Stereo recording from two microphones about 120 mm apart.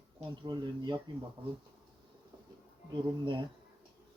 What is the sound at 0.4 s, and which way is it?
Speech, 40° right (ahead or behind).